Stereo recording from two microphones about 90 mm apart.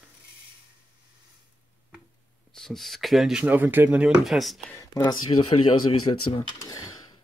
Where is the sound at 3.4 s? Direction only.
20° right (ahead or behind).